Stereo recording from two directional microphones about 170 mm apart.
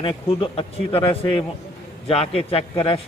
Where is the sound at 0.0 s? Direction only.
35° left (ahead or behind).